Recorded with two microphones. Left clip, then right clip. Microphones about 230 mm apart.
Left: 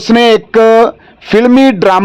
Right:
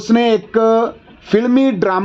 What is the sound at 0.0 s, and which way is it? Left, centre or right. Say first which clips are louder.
A man's voice: left 7 dB; left.